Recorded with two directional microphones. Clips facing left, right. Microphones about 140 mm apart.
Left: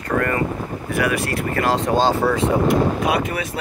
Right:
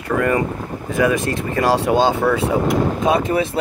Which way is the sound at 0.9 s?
20° right (ahead or behind).